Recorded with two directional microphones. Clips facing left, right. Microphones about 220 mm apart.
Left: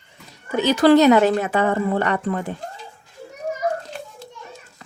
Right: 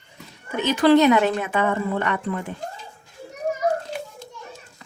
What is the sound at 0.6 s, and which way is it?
A woman's voice, 40° left (ahead or behind).